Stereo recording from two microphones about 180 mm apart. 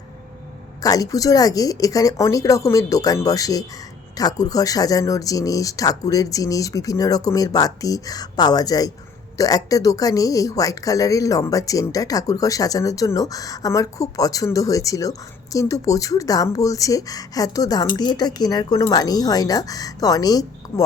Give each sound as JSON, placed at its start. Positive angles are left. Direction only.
{"t": 0.8, "sound": "a woman's voice", "side_deg": 20}